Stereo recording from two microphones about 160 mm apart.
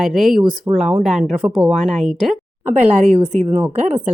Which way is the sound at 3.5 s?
10° right (ahead or behind).